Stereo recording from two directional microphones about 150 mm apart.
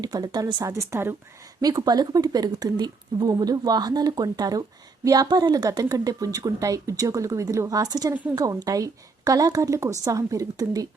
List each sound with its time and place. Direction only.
0.0 s speech: 25° right (ahead or behind)